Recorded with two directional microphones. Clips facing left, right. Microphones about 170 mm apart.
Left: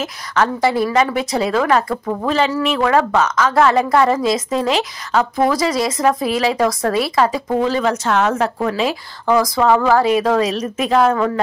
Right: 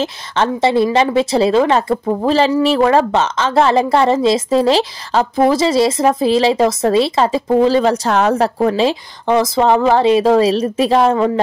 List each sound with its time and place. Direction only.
0.0 s speech: 25° right (ahead or behind)